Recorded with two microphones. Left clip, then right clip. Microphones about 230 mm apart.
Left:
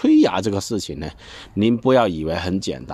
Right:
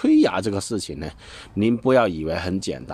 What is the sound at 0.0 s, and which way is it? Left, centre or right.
Speech, centre.